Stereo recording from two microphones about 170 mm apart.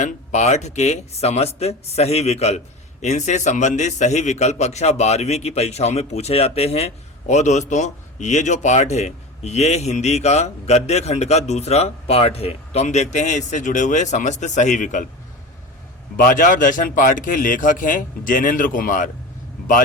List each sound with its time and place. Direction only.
0.0 s a man's voice: 45° left (ahead or behind)
16.1 s a man's voice: 55° left (ahead or behind)